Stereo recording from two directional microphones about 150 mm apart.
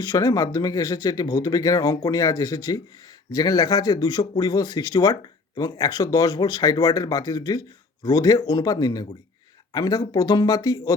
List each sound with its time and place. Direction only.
0.0 s speech: 25° left (ahead or behind)